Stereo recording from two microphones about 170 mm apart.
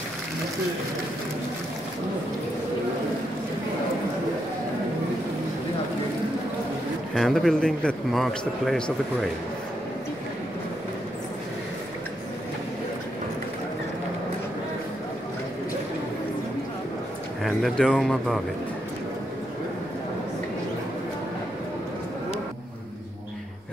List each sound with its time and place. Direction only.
7.2 s a man's voice: centre (ahead or behind)
17.4 s a man's voice: centre (ahead or behind)